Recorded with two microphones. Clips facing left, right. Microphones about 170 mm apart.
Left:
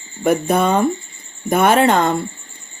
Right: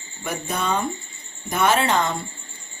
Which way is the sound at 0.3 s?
55° left (ahead or behind).